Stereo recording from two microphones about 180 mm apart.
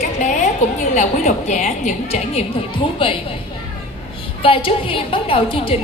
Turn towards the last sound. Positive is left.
turn(degrees=30)  # may be behind; listen again after turning